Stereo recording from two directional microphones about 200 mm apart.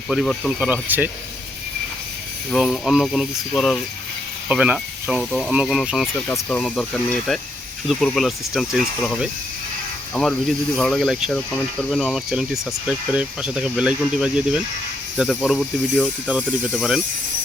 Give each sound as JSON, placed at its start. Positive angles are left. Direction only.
{"t": 0.1, "sound": "speech", "side_deg": 0}
{"t": 2.5, "sound": "speech", "side_deg": 0}
{"t": 10.8, "sound": "speech", "side_deg": 0}